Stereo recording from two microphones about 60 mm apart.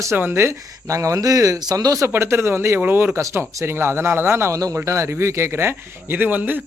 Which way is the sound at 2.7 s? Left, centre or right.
Right.